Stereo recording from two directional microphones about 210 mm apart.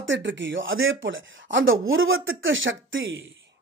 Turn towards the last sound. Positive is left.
turn(degrees=-65)  # may be behind; listen again after turning